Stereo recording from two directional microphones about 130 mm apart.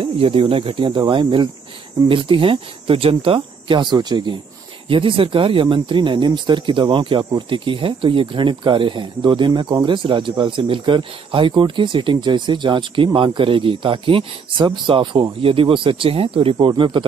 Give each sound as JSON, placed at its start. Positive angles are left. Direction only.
{"t": 0.0, "sound": "speech", "side_deg": -45}